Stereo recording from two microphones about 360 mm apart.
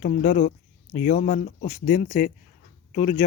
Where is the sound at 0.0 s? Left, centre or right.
Left.